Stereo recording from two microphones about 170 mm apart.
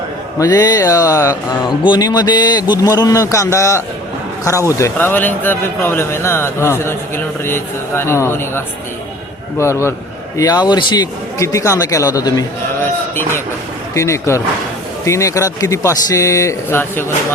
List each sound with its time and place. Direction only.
0.3 s a man's voice: 25° left (ahead or behind)